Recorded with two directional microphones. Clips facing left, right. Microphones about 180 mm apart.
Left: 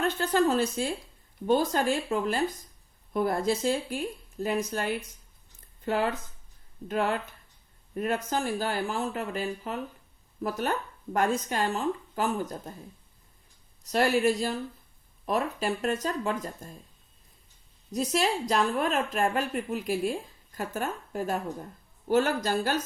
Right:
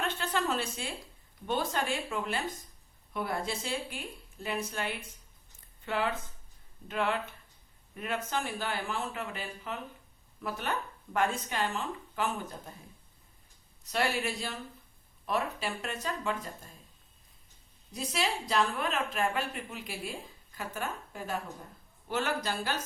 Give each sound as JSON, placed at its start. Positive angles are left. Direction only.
{"t": 0.0, "sound": "speech", "side_deg": 40}
{"t": 13.8, "sound": "speech", "side_deg": 40}
{"t": 17.9, "sound": "a woman's voice", "side_deg": 45}